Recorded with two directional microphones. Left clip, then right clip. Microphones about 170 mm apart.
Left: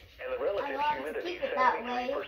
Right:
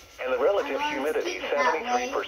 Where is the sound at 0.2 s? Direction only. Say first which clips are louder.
Right 8 dB; 35° right (ahead or behind).